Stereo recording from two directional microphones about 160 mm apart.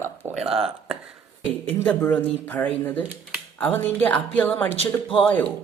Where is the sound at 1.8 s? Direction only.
10° left (ahead or behind).